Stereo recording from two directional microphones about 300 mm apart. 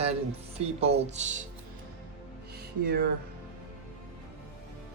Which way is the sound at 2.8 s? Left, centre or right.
Right.